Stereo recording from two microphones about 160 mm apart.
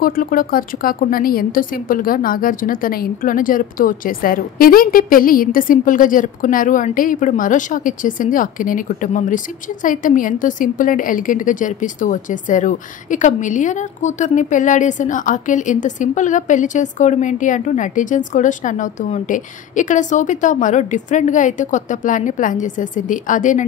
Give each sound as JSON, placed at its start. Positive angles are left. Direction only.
{"t": 0.0, "sound": "a woman's voice", "side_deg": 60}